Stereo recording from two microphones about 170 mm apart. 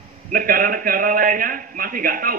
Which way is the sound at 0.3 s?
55° right (ahead or behind).